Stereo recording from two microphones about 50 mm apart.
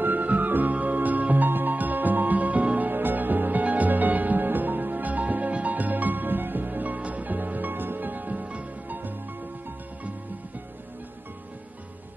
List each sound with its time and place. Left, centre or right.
0.0 s music: right